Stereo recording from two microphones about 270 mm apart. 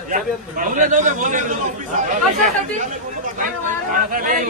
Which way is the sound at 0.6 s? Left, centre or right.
Right.